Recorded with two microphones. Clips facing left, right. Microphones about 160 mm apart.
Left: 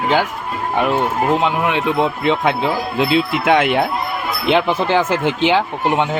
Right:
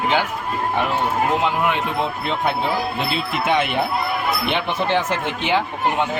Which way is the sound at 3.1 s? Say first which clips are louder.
Left 7 dB; 90° left.